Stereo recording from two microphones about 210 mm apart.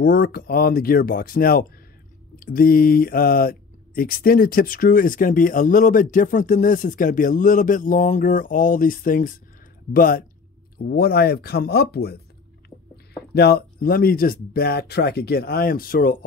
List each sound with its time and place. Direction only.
0.0 s speech: 45° left (ahead or behind)